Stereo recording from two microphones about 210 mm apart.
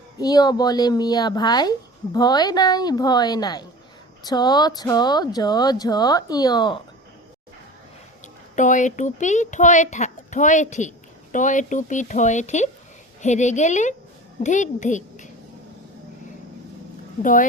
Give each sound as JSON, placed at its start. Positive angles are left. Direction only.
{"t": 0.2, "sound": "speech", "side_deg": 20}
{"t": 8.5, "sound": "a child's voice", "side_deg": 35}